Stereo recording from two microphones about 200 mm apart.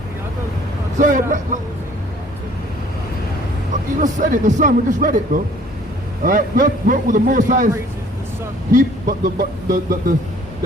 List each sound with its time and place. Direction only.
0.9 s a man's voice: 40° right (ahead or behind)
4.0 s a man's voice: 40° right (ahead or behind)
8.7 s speech: 45° right (ahead or behind)